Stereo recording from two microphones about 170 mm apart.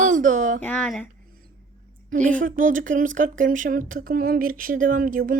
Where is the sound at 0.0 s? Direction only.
50° right (ahead or behind).